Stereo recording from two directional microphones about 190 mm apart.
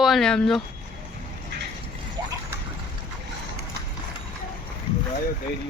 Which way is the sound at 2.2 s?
15° right (ahead or behind).